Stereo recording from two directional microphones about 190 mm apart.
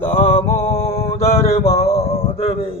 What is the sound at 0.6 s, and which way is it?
Music, 30° left (ahead or behind).